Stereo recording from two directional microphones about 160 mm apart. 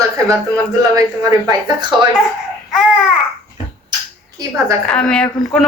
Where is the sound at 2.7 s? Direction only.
Centre (ahead or behind).